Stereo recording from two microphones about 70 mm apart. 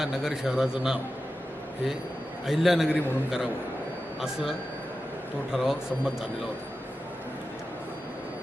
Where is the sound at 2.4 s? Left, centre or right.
Centre.